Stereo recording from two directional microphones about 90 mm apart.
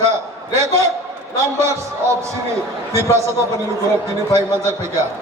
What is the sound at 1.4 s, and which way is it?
Speech, 30° right (ahead or behind).